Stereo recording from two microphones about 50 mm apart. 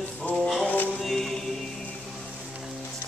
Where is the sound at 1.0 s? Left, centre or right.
Centre.